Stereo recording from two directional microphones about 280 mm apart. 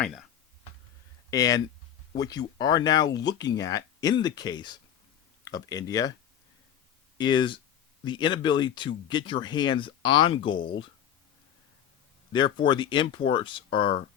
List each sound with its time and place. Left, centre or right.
0.0 s speech: centre
1.3 s speech: centre
7.2 s speech: centre
12.3 s speech: centre